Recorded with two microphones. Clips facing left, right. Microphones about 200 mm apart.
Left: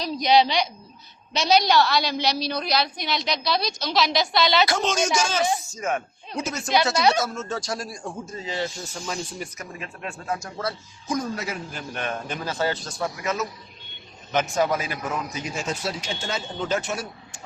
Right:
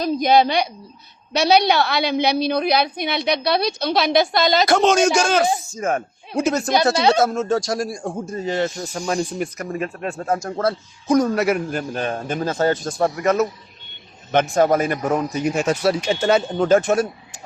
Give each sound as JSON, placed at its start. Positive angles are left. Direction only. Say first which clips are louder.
{"t": 0.0, "sound": "a woman's voice", "louder": "right 4 dB", "side_deg": -50}
{"t": 5.5, "sound": "speech", "louder": "right 4 dB", "side_deg": -45}
{"t": 6.9, "sound": "speech", "louder": "right 4 dB", "side_deg": -25}
{"t": 7.2, "sound": "a woman's voice", "louder": "right 9 dB", "side_deg": -55}
{"t": 11.9, "sound": "a woman's voice", "louder": "right 3 dB", "side_deg": -35}